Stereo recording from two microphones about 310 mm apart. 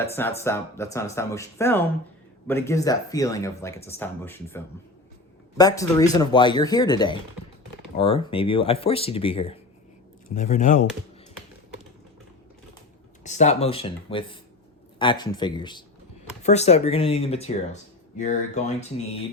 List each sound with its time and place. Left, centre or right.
0.2 s speech: centre
13.2 s speech: left